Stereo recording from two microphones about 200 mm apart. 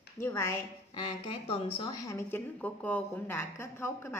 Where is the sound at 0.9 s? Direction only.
30° left (ahead or behind).